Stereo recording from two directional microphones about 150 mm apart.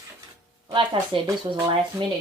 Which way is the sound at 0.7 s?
30° right (ahead or behind).